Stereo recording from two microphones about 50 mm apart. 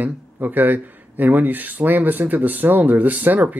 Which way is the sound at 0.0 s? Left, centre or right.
Right.